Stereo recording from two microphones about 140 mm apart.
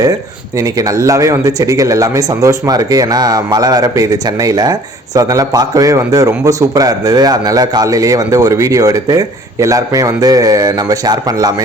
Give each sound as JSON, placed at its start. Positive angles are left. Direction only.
{"t": 0.0, "sound": "speech", "side_deg": -25}